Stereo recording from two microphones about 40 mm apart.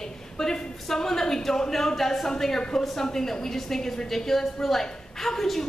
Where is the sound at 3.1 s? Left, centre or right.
Centre.